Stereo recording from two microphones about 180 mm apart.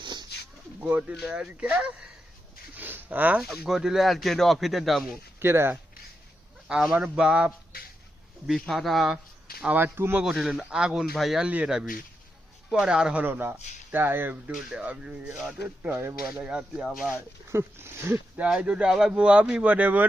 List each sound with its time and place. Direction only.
0.0 s a sound: 25° right (ahead or behind)
0.8 s speech: 10° right (ahead or behind)
5.4 s speech: 10° right (ahead or behind)